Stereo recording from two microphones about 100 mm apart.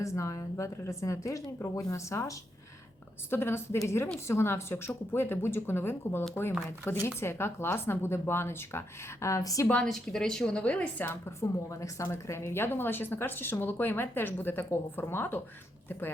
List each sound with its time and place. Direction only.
0.0 s a woman's voice: 30° left (ahead or behind)
9.6 s a woman's voice: 10° left (ahead or behind)